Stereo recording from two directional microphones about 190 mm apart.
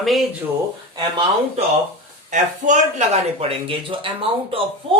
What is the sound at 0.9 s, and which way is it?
Speech, 25° right (ahead or behind).